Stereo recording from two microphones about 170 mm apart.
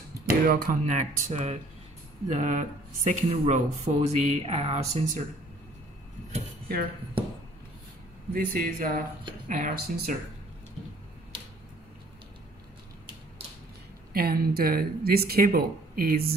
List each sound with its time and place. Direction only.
0.3 s speech: 55° right (ahead or behind); by 5.2 s 40° right (ahead or behind)
8.3 s speech: 55° right (ahead or behind)
14.1 s speech: 60° right (ahead or behind)